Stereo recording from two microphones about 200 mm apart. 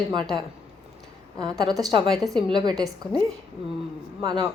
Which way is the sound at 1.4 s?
20° right (ahead or behind).